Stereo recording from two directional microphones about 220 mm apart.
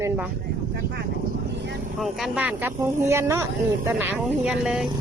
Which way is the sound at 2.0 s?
5° right (ahead or behind).